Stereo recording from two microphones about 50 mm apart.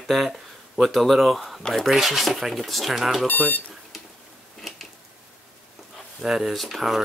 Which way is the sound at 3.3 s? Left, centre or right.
Left.